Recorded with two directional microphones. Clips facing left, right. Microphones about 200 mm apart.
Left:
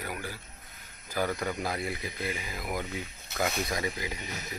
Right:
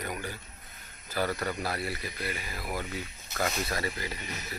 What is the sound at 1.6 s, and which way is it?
Speech, 15° left (ahead or behind).